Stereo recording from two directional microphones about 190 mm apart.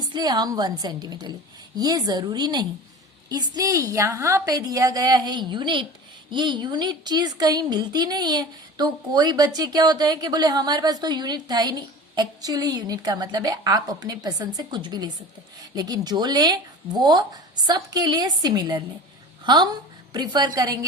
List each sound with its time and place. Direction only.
0.1 s a woman's voice: 20° right (ahead or behind)